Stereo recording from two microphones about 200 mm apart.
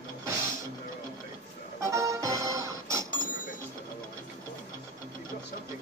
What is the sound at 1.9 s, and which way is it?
Music, 15° right (ahead or behind).